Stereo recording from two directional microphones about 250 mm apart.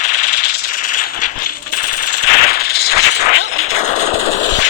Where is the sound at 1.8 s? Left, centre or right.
Left.